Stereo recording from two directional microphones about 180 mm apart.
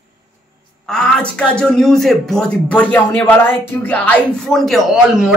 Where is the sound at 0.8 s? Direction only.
5° left (ahead or behind).